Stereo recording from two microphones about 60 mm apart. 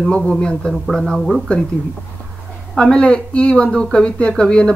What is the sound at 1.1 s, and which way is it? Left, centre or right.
Speech, centre.